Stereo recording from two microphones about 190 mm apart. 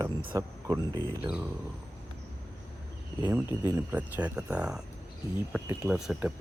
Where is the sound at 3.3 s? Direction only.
10° right (ahead or behind).